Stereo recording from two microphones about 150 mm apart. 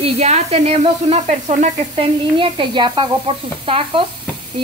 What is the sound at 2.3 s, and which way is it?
Sizzle, 35° right (ahead or behind).